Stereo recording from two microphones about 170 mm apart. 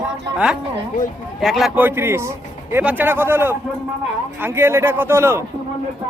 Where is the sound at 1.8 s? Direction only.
15° right (ahead or behind).